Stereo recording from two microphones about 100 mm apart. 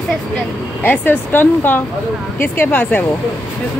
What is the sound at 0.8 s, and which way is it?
Speech, 20° left (ahead or behind).